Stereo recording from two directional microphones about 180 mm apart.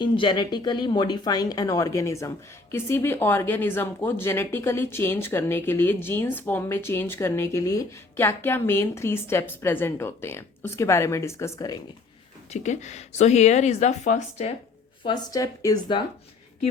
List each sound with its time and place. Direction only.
0.0 s speech: 25° left (ahead or behind)
12.5 s a woman's voice: 40° left (ahead or behind)
15.0 s speech: 20° left (ahead or behind)